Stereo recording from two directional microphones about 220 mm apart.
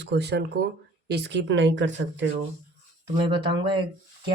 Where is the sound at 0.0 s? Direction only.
50° right (ahead or behind).